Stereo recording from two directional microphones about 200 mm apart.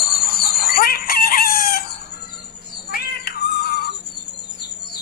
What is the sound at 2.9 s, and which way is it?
Cat, 50° left (ahead or behind).